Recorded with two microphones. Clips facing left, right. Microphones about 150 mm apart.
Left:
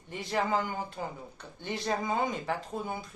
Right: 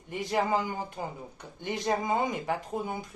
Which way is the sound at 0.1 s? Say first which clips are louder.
Right 2 dB; 15° right (ahead or behind).